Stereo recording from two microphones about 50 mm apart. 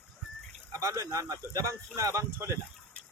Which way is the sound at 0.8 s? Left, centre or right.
Right.